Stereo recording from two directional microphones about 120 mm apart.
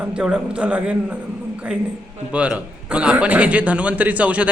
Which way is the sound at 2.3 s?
10° right (ahead or behind).